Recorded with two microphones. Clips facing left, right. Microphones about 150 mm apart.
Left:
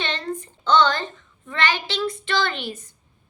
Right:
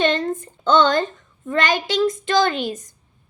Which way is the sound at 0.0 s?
45° right (ahead or behind).